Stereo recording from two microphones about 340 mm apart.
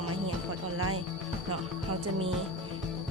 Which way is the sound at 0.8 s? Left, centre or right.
Right.